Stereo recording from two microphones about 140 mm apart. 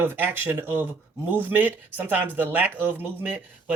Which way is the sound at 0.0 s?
15° right (ahead or behind).